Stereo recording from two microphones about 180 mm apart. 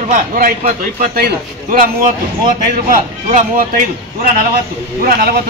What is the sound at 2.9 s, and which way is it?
Speech, 45° right (ahead or behind).